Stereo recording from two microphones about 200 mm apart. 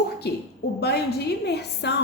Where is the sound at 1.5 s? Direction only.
55° left (ahead or behind).